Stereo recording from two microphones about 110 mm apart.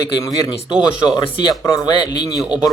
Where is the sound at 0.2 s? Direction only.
35° left (ahead or behind).